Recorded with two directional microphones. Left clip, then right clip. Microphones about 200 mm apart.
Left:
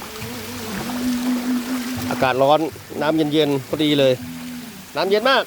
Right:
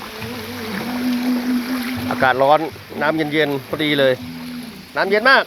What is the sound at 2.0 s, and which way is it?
Speech, 20° left (ahead or behind).